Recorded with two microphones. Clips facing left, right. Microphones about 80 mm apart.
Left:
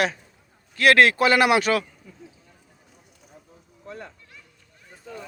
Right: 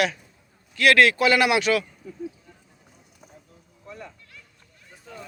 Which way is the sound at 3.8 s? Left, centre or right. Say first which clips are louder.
Left 2 dB; left.